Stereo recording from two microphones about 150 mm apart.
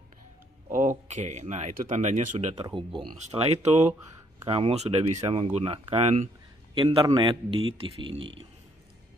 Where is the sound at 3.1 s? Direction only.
50° right (ahead or behind).